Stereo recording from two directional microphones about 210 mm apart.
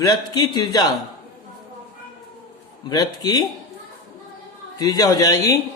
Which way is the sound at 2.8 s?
20° left (ahead or behind).